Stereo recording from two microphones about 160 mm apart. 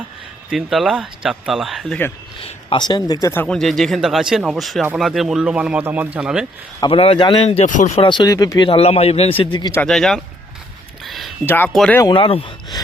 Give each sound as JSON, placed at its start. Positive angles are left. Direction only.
{"t": 0.5, "sound": "speech", "side_deg": 0}
{"t": 2.4, "sound": "speech", "side_deg": 30}
{"t": 3.4, "sound": "speech", "side_deg": 5}
{"t": 6.7, "sound": "speech", "side_deg": 30}
{"t": 7.9, "sound": "speech", "side_deg": 30}
{"t": 9.4, "sound": "speech", "side_deg": 30}
{"t": 9.8, "sound": "speech", "side_deg": 5}
{"t": 11.0, "sound": "a sound", "side_deg": 0}
{"t": 11.4, "sound": "speech", "side_deg": 10}
{"t": 11.9, "sound": "speech", "side_deg": 30}